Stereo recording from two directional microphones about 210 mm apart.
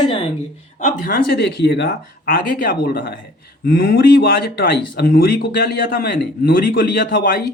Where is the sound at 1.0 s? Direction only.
45° left (ahead or behind).